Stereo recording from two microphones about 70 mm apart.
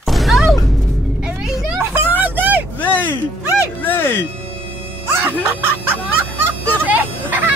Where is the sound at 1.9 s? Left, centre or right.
Right.